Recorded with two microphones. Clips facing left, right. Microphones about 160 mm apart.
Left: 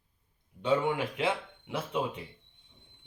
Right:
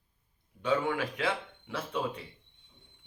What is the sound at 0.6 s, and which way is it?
A man's voice, 20° left (ahead or behind).